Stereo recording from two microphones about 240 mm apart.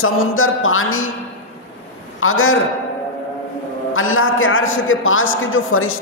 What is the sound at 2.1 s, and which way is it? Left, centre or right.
Speech, left.